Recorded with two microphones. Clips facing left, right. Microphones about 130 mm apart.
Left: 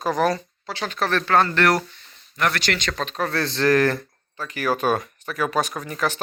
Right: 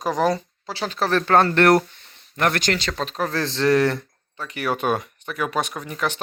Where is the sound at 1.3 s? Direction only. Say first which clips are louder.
Right 4 dB; 45° right (ahead or behind).